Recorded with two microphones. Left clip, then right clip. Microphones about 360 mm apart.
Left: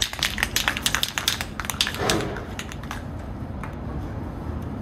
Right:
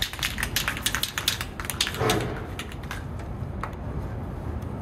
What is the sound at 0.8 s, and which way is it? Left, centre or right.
Typing, centre.